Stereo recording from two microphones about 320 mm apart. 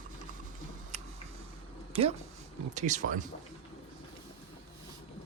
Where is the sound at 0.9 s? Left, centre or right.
Right.